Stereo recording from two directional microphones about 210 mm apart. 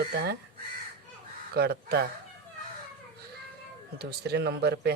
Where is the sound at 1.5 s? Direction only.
50° right (ahead or behind).